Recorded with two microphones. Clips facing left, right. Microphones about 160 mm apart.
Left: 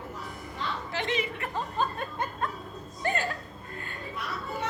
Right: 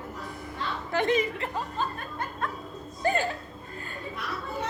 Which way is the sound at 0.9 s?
50° right (ahead or behind).